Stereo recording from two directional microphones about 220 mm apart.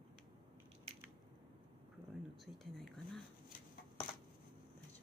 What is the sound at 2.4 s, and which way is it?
Whispering, centre (ahead or behind).